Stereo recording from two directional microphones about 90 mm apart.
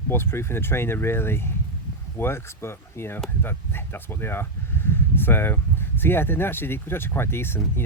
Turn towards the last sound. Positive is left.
turn(degrees=25)  # may be behind; listen again after turning